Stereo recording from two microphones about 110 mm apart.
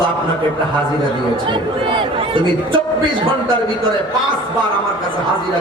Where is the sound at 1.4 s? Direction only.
50° right (ahead or behind).